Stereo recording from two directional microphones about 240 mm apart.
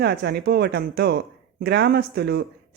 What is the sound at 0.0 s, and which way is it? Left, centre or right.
Speech, right.